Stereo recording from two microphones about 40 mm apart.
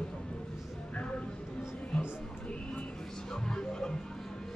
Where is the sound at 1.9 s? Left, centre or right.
Centre.